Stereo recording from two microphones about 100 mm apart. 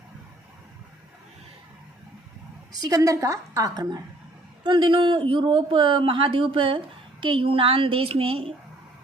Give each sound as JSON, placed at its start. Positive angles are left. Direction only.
{"t": 2.8, "sound": "a woman's voice", "side_deg": -35}
{"t": 4.6, "sound": "speech", "side_deg": -55}